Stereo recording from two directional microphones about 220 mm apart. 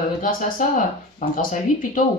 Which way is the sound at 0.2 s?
35° left (ahead or behind).